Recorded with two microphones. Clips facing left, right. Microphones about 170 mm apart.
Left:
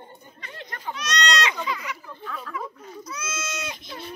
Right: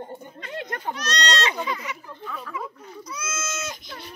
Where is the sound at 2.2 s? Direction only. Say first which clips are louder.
Even; 5° right (ahead or behind).